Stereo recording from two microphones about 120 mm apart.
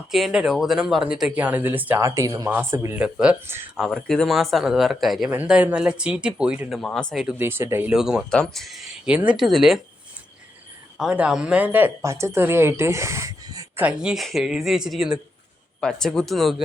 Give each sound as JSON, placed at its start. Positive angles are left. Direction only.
{"t": 0.1, "sound": "speech", "side_deg": -5}
{"t": 3.8, "sound": "speech", "side_deg": 5}
{"t": 6.7, "sound": "speech", "side_deg": 5}
{"t": 7.3, "sound": "speech", "side_deg": -20}
{"t": 7.9, "sound": "speech", "side_deg": -5}
{"t": 8.3, "sound": "speech", "side_deg": 5}
{"t": 10.9, "sound": "speech", "side_deg": -10}
{"t": 13.7, "sound": "speech", "side_deg": -10}